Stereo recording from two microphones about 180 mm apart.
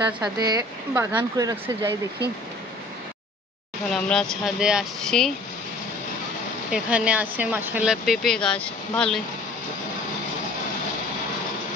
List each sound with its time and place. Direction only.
0.4 s speech: 20° right (ahead or behind)
3.9 s speech: 5° left (ahead or behind)
6.7 s speech: 5° right (ahead or behind)